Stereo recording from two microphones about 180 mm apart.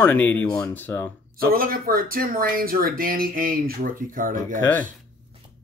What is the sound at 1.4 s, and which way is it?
Speech, 50° right (ahead or behind).